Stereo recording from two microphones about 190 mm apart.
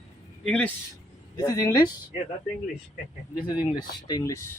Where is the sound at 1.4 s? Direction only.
20° left (ahead or behind).